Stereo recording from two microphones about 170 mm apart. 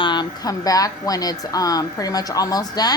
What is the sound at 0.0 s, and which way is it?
A woman's voice, 25° left (ahead or behind).